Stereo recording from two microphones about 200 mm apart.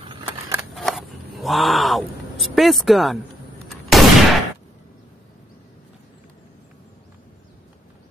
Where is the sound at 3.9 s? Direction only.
Centre (ahead or behind).